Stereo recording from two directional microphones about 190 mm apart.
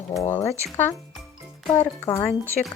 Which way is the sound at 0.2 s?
15° left (ahead or behind).